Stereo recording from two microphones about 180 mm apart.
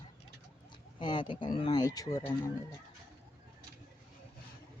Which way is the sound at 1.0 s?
25° left (ahead or behind).